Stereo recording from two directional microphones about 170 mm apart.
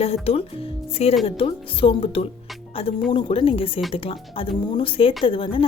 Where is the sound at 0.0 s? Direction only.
35° left (ahead or behind).